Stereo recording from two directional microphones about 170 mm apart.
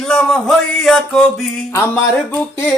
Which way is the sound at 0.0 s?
5° left (ahead or behind).